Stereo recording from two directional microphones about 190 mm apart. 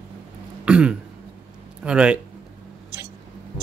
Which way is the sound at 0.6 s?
5° right (ahead or behind).